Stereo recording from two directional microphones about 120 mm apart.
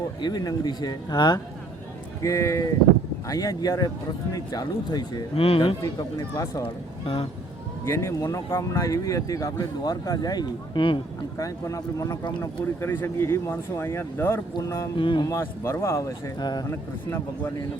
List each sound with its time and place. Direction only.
0.2 s speech: 35° left (ahead or behind)
2.2 s speech: 25° left (ahead or behind)
5.3 s speech: 55° left (ahead or behind)
5.8 s speech: 30° left (ahead or behind)
6.6 s speech: 50° left (ahead or behind)
7.9 s speech: 20° left (ahead or behind); by 11.0 s 45° left (ahead or behind)
11.3 s speech: 25° left (ahead or behind)
14.9 s speech: 45° left (ahead or behind)
15.3 s speech: 20° left (ahead or behind)
16.4 s speech: 35° left (ahead or behind)
16.6 s a man's voice: 15° left (ahead or behind)